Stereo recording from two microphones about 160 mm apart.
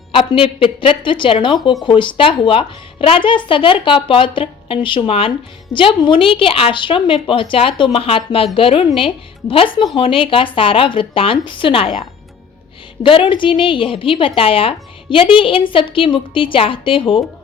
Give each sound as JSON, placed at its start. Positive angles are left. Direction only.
{"t": 0.1, "sound": "speech", "side_deg": 35}